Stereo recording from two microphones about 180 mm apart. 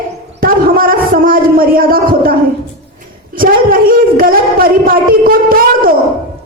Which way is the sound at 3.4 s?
55° right (ahead or behind).